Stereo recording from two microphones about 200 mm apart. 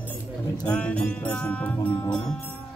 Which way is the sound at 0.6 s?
5° left (ahead or behind).